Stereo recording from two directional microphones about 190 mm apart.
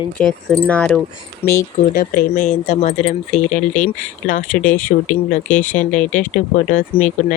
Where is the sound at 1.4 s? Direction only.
30° left (ahead or behind).